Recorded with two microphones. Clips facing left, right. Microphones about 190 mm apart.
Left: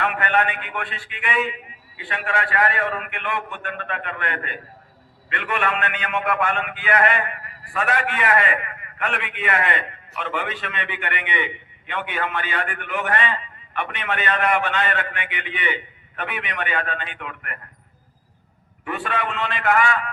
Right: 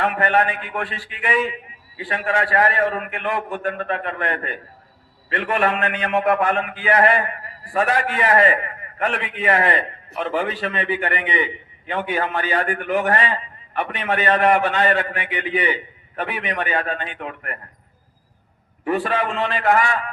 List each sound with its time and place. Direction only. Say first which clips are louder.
0.0 s a man's voice: right 3 dB; 35° right (ahead or behind)
18.9 s a man's voice: right 5 dB; 35° right (ahead or behind)